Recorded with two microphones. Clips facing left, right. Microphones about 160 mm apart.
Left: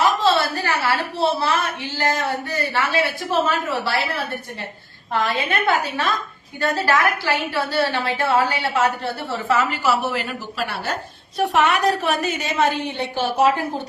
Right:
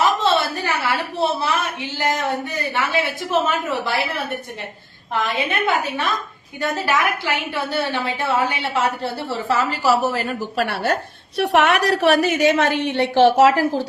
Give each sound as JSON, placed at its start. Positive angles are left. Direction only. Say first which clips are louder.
{"t": 0.0, "sound": "a sound", "louder": "even", "side_deg": -20}
{"t": 2.0, "sound": "a woman's voice", "louder": "right 1 dB", "side_deg": -20}
{"t": 5.2, "sound": "a woman's voice", "louder": "even", "side_deg": -20}
{"t": 9.5, "sound": "a woman's voice", "louder": "right 1 dB", "side_deg": -35}
{"t": 10.6, "sound": "a woman's voice", "louder": "right 6 dB", "side_deg": -60}
{"t": 11.3, "sound": "a woman's voice", "louder": "right 2 dB", "side_deg": -75}